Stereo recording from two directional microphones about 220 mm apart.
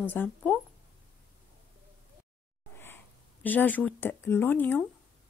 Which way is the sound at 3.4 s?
10° left (ahead or behind).